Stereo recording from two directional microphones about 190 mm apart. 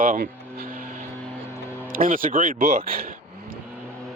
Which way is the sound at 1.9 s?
45° right (ahead or behind).